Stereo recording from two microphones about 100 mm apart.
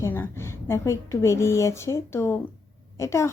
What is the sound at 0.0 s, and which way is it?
A woman's voice, 25° left (ahead or behind).